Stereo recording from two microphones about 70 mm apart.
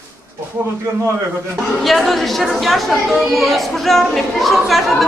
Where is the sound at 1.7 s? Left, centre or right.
Centre.